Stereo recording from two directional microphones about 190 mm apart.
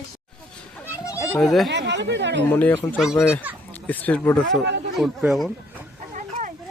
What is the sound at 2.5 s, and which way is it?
Speech, 10° left (ahead or behind).